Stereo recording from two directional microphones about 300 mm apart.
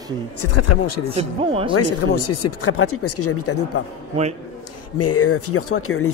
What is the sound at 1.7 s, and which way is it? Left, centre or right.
Speech, left.